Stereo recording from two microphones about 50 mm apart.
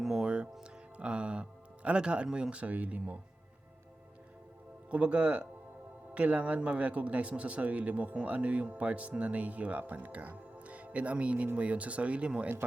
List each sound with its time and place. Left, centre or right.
0.0 s music: centre
4.9 s speech: right